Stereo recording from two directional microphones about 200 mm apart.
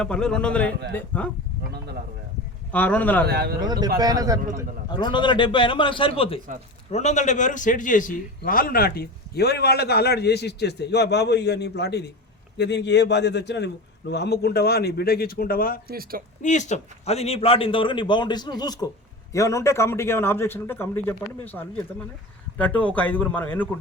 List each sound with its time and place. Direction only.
0.0 s a man's voice: 5° left (ahead or behind)
2.7 s a man's voice: 5° left (ahead or behind)
3.2 s a man's voice: 55° right (ahead or behind)
3.6 s speech: 20° right (ahead or behind)
5.1 s a man's voice: 25° left (ahead or behind); by 15.8 s 45° left (ahead or behind)
15.9 s speech: 50° right (ahead or behind)
16.4 s a man's voice: 35° left (ahead or behind); by 23.6 s 10° left (ahead or behind)